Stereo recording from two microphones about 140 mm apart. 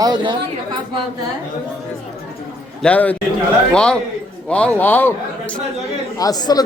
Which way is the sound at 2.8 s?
10° left (ahead or behind).